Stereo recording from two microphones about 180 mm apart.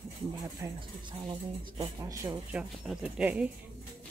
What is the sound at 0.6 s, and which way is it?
Speech, 25° right (ahead or behind).